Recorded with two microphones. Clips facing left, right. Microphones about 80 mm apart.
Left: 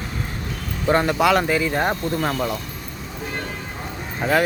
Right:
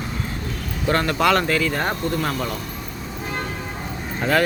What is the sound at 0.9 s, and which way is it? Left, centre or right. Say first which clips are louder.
A man's voice: left 1 dB; centre.